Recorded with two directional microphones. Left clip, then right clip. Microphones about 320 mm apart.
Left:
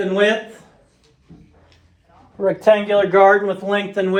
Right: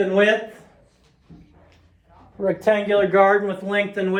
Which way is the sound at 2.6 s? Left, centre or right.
Left.